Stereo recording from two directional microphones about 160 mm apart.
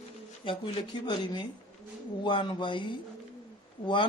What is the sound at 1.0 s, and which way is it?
A woman's voice, 25° left (ahead or behind).